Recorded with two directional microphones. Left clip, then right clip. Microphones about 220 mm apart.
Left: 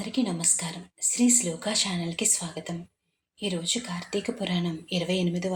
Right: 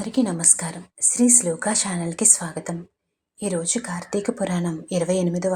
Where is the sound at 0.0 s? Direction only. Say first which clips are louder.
Right 6 dB; 25° right (ahead or behind).